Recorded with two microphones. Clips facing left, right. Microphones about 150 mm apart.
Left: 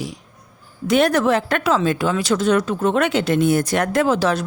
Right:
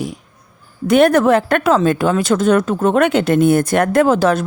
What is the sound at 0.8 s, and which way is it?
A woman's voice, 55° right (ahead or behind).